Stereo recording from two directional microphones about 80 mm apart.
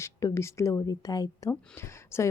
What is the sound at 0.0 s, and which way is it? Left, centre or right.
A woman's voice, left.